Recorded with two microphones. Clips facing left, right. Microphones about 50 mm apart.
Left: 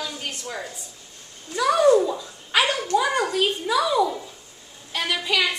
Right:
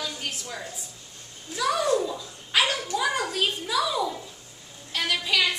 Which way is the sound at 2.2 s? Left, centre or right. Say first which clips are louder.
Left 3 dB; centre.